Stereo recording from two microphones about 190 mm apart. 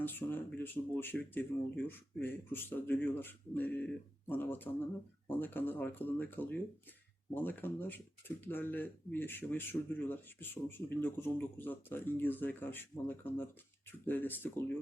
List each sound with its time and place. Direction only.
0.0 s speech: 10° left (ahead or behind)